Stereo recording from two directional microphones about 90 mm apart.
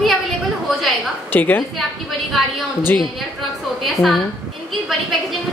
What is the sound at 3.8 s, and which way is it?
Speech, centre (ahead or behind).